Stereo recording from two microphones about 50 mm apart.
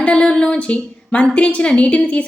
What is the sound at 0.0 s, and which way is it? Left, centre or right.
A woman's voice, left.